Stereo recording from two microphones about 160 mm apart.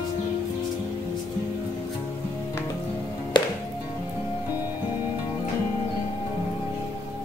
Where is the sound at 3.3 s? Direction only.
30° left (ahead or behind).